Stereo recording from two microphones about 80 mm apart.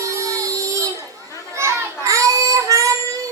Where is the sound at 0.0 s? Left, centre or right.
Right.